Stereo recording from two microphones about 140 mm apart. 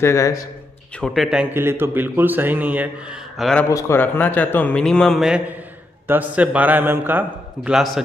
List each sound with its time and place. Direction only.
0.0 s speech: 20° left (ahead or behind)
0.9 s speech: centre (ahead or behind)
1.5 s a man's voice: 15° right (ahead or behind)
3.3 s speech: centre (ahead or behind)
3.6 s a man's voice: 20° left (ahead or behind); by 5.4 s centre (ahead or behind)
6.0 s a man's voice: 10° right (ahead or behind)